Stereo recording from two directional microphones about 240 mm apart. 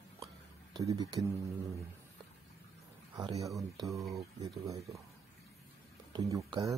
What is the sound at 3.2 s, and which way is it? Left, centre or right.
Speech, centre.